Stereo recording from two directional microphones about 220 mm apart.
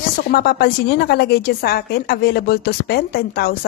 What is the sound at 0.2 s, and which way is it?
A woman's voice, 45° left (ahead or behind).